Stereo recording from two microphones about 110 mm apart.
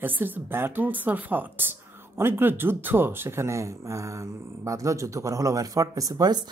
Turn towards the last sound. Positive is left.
turn(degrees=-40)  # may be behind; listen again after turning